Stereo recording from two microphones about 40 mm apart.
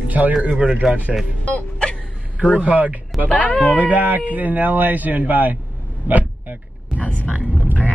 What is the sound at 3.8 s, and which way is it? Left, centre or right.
Speech, right.